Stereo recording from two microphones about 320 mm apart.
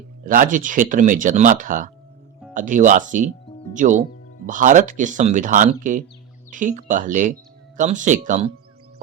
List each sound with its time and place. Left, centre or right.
0.3 s speech: right